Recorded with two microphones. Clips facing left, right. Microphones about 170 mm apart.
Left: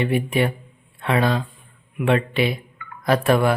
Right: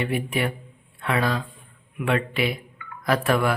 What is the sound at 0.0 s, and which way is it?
A man's voice, 25° left (ahead or behind).